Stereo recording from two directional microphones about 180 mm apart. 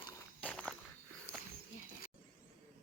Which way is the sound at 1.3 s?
55° left (ahead or behind).